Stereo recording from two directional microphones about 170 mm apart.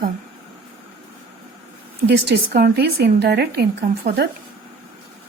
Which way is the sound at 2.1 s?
75° right (ahead or behind).